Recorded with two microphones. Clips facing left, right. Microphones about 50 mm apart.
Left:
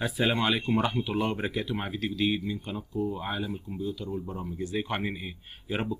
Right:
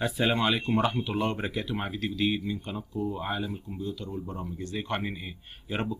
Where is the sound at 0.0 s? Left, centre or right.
Centre.